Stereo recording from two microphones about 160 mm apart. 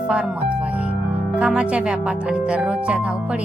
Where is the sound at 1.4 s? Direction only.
5° right (ahead or behind).